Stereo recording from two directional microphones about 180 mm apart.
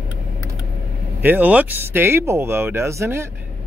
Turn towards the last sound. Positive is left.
turn(degrees=-15)  # may be behind; listen again after turning